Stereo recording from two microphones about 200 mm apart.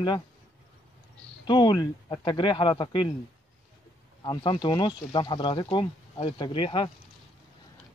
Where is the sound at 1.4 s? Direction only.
20° left (ahead or behind).